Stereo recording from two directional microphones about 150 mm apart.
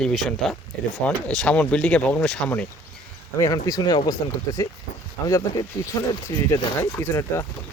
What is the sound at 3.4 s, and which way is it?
Speech, 25° left (ahead or behind).